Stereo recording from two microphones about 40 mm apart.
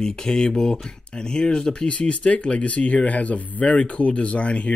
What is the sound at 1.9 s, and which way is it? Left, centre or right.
Speech, left.